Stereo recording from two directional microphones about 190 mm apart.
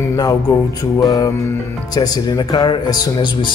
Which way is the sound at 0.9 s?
20° left (ahead or behind).